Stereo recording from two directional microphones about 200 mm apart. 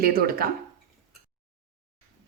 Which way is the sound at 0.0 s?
50° right (ahead or behind).